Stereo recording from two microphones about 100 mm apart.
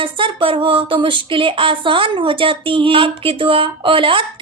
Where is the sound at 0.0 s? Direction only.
60° right (ahead or behind).